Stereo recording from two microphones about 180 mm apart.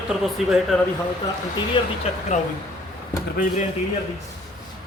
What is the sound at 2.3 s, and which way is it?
Speech, 40° left (ahead or behind).